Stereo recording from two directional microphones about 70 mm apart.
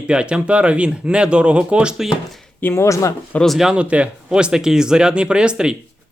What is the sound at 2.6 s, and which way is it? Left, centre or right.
Speech, left.